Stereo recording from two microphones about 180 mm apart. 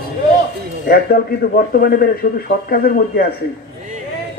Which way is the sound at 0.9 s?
55° left (ahead or behind).